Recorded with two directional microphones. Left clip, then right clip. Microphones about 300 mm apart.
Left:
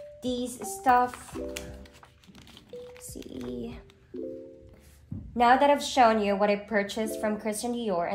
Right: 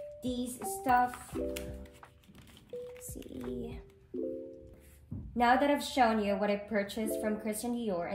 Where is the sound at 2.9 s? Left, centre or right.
Centre.